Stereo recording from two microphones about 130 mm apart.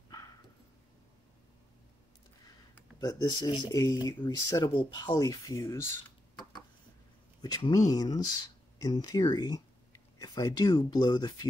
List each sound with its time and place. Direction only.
3.0 s speech: 30° left (ahead or behind)
4.6 s speech: 40° left (ahead or behind)
5.1 s speech: 25° left (ahead or behind)
7.4 s speech: 30° left (ahead or behind)